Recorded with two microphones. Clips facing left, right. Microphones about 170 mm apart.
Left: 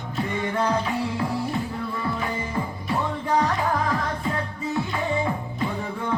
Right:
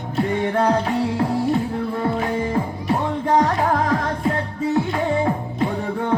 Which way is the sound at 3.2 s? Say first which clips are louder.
Right 5 dB; 60° right (ahead or behind).